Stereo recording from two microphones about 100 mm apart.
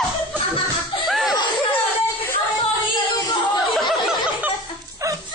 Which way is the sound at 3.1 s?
45° left (ahead or behind).